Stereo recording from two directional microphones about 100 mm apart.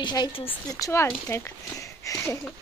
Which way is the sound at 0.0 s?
45° left (ahead or behind).